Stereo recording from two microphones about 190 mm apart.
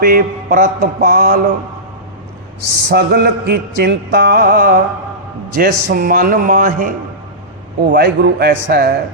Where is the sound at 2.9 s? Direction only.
55° right (ahead or behind).